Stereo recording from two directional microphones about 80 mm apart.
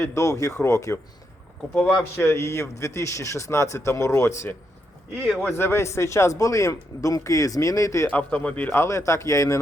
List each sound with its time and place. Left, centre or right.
0.0 s speech: left
2.1 s speech: left
5.1 s speech: centre
5.5 s speech: left
8.0 s speech: centre
8.7 s speech: left